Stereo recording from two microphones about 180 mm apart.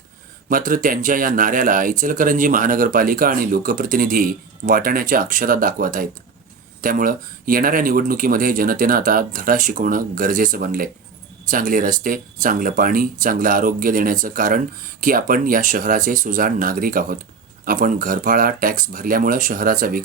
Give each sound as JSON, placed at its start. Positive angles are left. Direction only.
{"t": 0.4, "sound": "speech", "side_deg": -50}